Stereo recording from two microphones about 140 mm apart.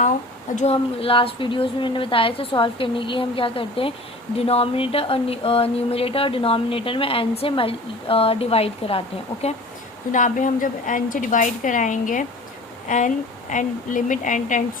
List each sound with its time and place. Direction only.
0.5 s a woman's voice: 50° left (ahead or behind)
4.4 s a sound: 45° left (ahead or behind)
10.1 s a woman's voice: 65° left (ahead or behind)